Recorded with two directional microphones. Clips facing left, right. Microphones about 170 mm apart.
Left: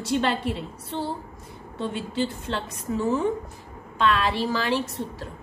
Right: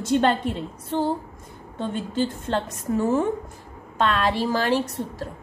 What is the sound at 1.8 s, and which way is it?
A woman's voice, 45° right (ahead or behind).